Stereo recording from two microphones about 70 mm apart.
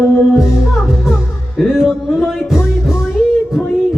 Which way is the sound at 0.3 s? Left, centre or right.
Centre.